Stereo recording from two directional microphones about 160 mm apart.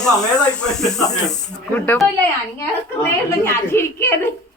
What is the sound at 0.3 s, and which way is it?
A woman's voice, 5° left (ahead or behind).